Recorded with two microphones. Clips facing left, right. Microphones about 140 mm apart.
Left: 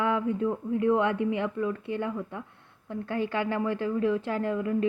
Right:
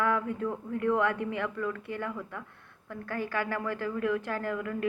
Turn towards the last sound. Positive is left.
turn(degrees=20)  # may be behind; listen again after turning